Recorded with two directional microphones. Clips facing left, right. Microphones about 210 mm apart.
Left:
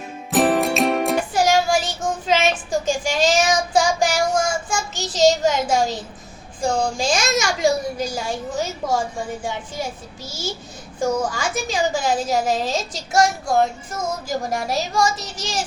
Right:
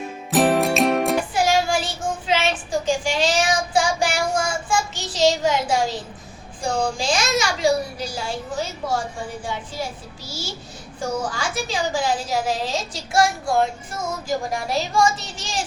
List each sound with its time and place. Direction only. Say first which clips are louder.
0.3 s music: even; centre (ahead or behind)
1.3 s child singing: left 2 dB; 40° left (ahead or behind)
6.6 s a woman's voice: left 2 dB; 45° left (ahead or behind)
11.0 s a woman's voice: left 4 dB; 45° left (ahead or behind)
14.7 s child singing: right 2 dB; 40° left (ahead or behind)